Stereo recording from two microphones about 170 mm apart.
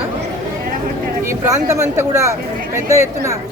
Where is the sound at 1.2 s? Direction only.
15° right (ahead or behind).